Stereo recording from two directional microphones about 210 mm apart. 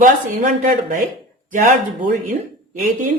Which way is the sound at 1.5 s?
40° right (ahead or behind).